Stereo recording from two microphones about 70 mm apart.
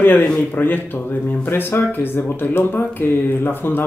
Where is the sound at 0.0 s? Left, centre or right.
Left.